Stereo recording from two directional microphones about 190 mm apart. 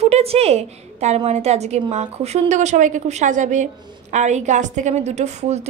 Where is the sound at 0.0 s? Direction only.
35° right (ahead or behind).